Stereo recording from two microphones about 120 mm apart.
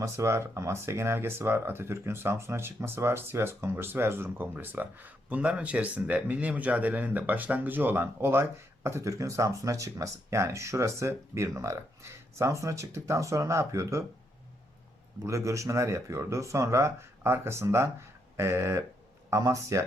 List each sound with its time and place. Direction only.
0.0 s speech: 25° right (ahead or behind)
15.2 s speech: 25° right (ahead or behind)